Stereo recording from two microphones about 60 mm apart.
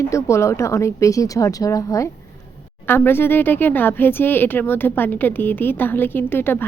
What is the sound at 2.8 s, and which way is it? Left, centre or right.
A woman's voice, left.